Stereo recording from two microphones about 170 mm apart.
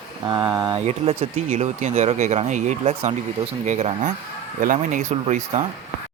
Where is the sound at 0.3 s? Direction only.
15° right (ahead or behind).